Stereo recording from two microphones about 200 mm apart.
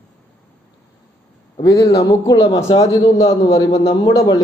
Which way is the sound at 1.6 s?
15° left (ahead or behind).